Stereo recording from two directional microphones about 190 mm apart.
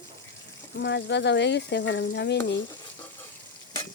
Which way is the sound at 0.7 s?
60° left (ahead or behind).